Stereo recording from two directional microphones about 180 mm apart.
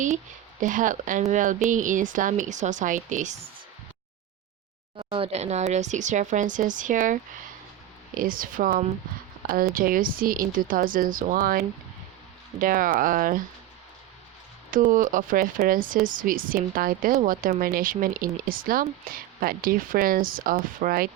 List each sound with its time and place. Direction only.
0.6 s speech: 45° right (ahead or behind)
4.9 s speech: 30° right (ahead or behind); by 13.4 s 50° right (ahead or behind)
14.7 s speech: 45° right (ahead or behind)